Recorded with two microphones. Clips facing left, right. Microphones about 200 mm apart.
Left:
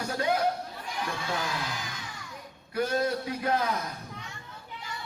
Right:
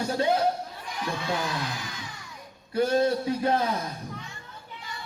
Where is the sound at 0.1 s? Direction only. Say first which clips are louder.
Right 3 dB; 25° right (ahead or behind).